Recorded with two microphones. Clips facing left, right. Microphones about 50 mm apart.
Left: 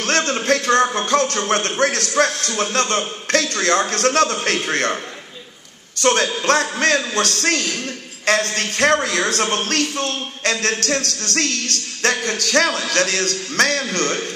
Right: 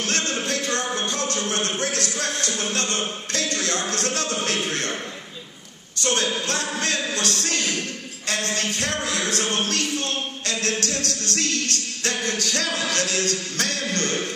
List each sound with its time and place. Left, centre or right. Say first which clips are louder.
0.0 s a man's voice: left 6 dB; left
6.4 s a man's voice: left 9 dB; left
12.0 s music: left 7 dB; left
12.4 s a man's voice: left 7 dB; left